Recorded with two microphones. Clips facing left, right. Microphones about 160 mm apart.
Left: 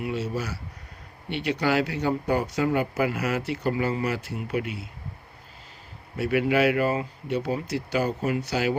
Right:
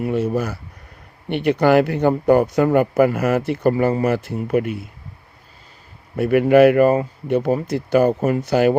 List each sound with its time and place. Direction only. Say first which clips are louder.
0.0 s speech: right 9 dB; 55° right (ahead or behind)
6.1 s speech: right 10 dB; 50° right (ahead or behind)